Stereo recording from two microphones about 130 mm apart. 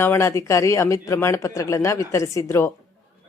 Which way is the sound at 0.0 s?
20° left (ahead or behind).